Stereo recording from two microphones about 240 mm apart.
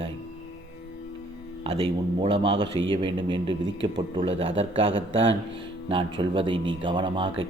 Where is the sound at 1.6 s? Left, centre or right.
Right.